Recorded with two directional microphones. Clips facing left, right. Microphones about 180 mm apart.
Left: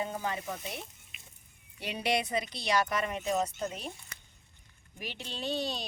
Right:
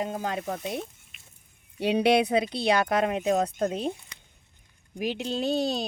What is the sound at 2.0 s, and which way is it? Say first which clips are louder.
Speech: right 9 dB; 65° right (ahead or behind).